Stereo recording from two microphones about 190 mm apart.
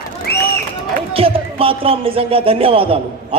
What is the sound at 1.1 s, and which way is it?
Speech, 30° right (ahead or behind).